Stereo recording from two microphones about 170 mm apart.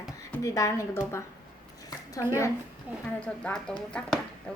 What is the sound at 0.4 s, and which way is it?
Speech, 20° left (ahead or behind).